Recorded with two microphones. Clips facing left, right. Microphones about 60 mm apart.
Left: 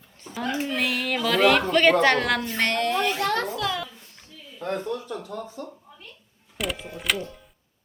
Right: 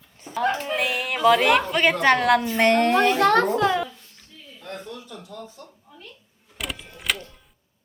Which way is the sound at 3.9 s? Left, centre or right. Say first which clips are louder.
Left 2 dB; centre.